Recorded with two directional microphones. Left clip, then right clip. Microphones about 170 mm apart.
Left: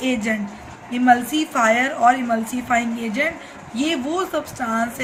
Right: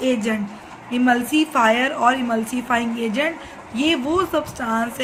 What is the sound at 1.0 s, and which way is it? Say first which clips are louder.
A woman's voice: left 2 dB; 25° right (ahead or behind).